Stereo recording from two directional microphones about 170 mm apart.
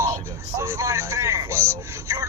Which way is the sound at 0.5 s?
15° right (ahead or behind).